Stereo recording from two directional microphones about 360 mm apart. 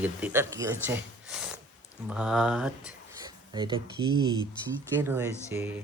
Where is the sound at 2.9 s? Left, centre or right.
Centre.